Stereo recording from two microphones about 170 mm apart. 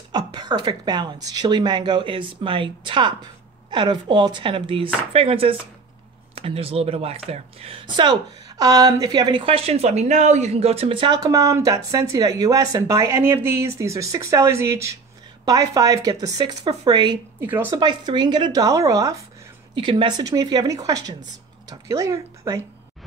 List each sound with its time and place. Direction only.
0.1 s speech: 25° right (ahead or behind)
17.4 s speech: 10° right (ahead or behind)
17.6 s speech: 25° right (ahead or behind)